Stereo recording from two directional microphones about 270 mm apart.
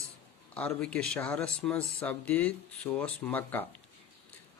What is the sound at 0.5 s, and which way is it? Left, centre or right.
A man's voice, centre.